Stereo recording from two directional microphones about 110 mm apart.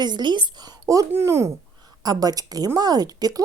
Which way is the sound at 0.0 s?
45° right (ahead or behind).